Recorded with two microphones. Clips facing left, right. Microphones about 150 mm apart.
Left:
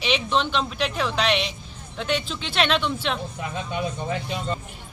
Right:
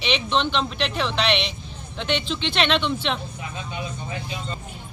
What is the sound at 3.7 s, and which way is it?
Speech, 60° left (ahead or behind).